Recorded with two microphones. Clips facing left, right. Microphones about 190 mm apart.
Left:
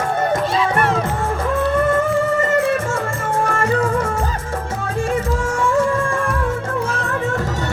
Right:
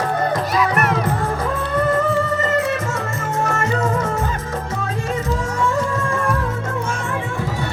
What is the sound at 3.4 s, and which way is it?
Music, 30° left (ahead or behind).